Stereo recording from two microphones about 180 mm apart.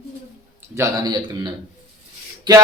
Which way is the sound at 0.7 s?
20° right (ahead or behind).